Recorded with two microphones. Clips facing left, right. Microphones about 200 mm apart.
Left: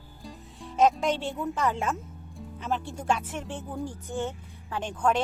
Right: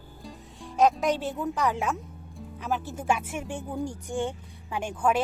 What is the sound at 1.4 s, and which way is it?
Speech, centre (ahead or behind).